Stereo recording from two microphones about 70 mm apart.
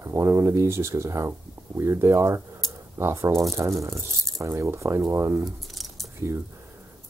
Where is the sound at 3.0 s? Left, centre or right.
Right.